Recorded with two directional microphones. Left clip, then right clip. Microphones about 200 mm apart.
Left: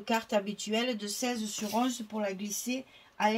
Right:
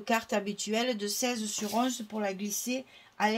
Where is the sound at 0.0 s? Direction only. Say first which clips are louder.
Even; 40° right (ahead or behind).